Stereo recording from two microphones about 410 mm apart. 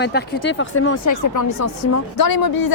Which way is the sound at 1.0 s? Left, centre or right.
Left.